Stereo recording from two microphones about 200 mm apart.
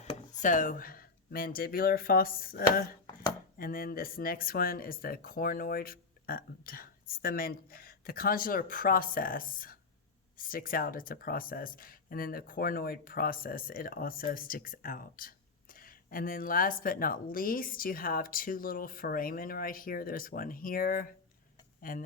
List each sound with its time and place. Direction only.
0.0 s speech: 35° left (ahead or behind)